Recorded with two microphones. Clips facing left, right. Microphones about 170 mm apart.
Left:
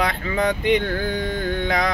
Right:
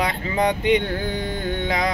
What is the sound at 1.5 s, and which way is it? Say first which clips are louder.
Music: left 1 dB; 25° right (ahead or behind).